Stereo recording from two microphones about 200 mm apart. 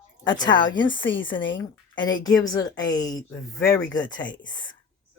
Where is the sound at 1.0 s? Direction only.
70° left (ahead or behind).